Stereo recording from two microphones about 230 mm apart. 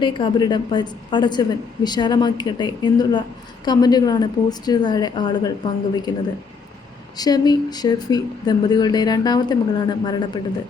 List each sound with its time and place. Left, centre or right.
0.0 s a woman's voice: left
7.2 s speech: centre